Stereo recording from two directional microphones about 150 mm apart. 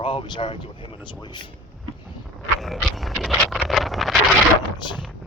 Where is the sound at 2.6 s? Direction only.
Centre (ahead or behind).